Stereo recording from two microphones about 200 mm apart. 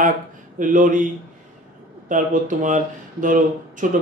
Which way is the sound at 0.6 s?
40° right (ahead or behind).